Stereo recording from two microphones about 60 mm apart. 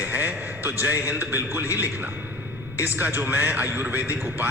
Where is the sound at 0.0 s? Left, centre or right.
Right.